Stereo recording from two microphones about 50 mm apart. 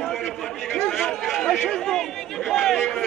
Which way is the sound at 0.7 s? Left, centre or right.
Centre.